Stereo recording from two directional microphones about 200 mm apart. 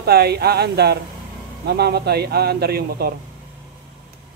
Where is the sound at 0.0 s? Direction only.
55° right (ahead or behind).